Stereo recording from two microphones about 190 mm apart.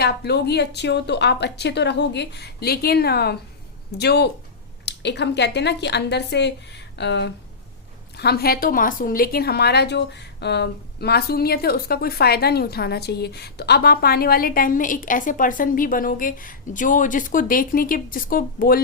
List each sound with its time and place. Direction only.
0.0 s a woman's voice: 60° left (ahead or behind)